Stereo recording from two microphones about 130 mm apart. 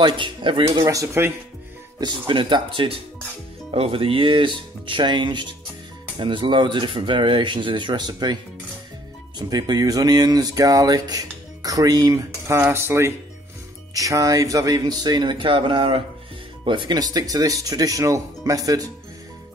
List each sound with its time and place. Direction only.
0.0 s speech: 40° right (ahead or behind)
0.8 s speech: 20° right (ahead or behind)
2.0 s speech: 35° right (ahead or behind)
9.4 s speech: 30° right (ahead or behind)